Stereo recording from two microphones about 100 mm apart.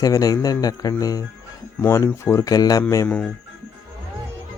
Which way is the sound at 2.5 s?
40° left (ahead or behind).